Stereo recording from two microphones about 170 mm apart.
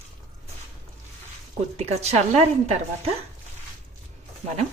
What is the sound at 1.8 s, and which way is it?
A woman's voice, 40° right (ahead or behind).